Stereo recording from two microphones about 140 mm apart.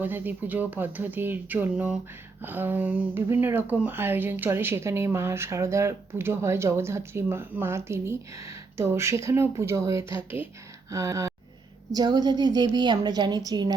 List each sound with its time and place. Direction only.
0.0 s a woman's voice: 15° right (ahead or behind)